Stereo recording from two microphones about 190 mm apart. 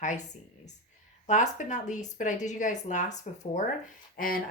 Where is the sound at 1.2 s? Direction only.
40° left (ahead or behind).